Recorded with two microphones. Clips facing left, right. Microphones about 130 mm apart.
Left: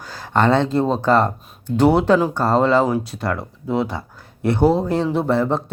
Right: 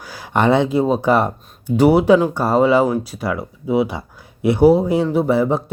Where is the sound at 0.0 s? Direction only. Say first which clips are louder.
Right 1 dB; 10° right (ahead or behind).